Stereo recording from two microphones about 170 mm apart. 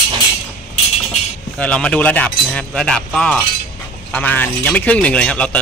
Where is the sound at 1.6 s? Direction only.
5° left (ahead or behind).